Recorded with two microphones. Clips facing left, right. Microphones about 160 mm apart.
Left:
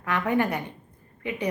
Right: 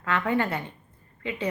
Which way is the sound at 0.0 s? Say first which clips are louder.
Left 1 dB; 15° left (ahead or behind).